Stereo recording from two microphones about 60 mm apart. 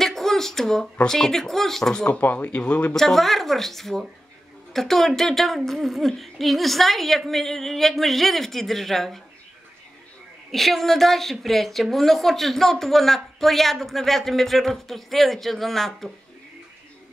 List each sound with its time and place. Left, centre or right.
0.0 s a sound: centre
1.0 s speech: centre
2.1 s speech: left
2.9 s a woman's voice: centre
10.5 s a woman's voice: centre